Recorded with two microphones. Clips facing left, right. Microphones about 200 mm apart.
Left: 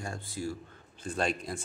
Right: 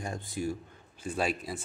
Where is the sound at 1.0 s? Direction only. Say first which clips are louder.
Even; 5° right (ahead or behind).